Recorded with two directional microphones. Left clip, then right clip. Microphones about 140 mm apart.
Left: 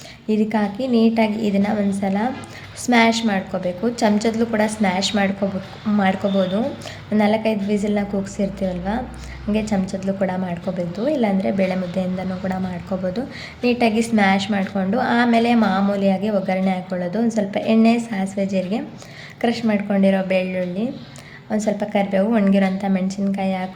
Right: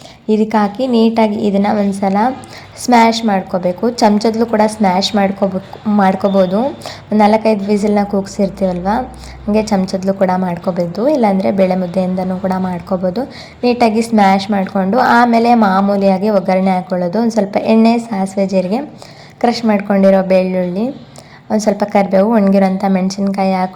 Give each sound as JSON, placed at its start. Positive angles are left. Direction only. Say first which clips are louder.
{"t": 0.3, "sound": "a woman's voice", "louder": "right 8 dB", "side_deg": -35}
{"t": 7.2, "sound": "a woman's voice", "louder": "right 8 dB", "side_deg": -35}
{"t": 15.0, "sound": "a woman's voice", "louder": "right 8 dB", "side_deg": -35}
{"t": 15.5, "sound": "a woman's voice", "louder": "right 8 dB", "side_deg": -10}
{"t": 15.9, "sound": "a woman's voice", "louder": "right 8 dB", "side_deg": -35}
{"t": 20.0, "sound": "a woman's voice", "louder": "right 9 dB", "side_deg": -35}